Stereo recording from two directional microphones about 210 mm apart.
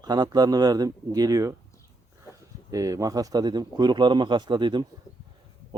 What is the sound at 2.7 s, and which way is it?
Speech, 15° right (ahead or behind).